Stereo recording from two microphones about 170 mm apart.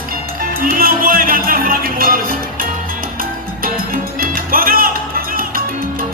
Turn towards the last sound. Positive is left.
turn(degrees=-60)  # may be behind; listen again after turning